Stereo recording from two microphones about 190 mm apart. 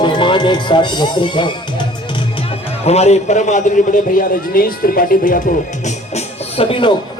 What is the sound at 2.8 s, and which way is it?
A man's voice, 35° left (ahead or behind).